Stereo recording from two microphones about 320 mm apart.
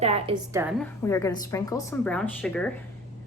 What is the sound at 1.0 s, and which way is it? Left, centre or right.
Speech, centre.